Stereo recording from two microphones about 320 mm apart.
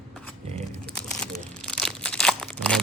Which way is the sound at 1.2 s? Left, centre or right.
Centre.